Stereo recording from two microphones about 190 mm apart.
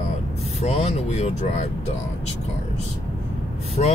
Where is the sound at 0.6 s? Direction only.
35° left (ahead or behind).